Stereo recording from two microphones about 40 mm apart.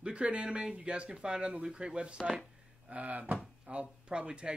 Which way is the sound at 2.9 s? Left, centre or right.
Right.